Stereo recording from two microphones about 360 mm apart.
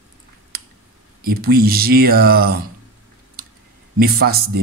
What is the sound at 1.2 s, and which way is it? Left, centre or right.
Speech, right.